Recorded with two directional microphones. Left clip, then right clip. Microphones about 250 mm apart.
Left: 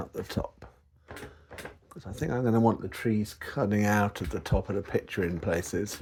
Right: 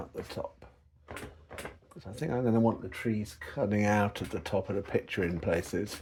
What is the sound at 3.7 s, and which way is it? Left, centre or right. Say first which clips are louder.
Speech: left 1 dB; centre.